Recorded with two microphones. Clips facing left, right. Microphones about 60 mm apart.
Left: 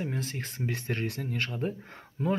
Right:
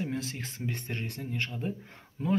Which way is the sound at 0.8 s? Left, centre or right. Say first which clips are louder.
Left 5 dB; left.